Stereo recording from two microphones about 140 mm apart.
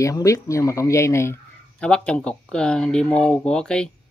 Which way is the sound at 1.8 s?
5° left (ahead or behind).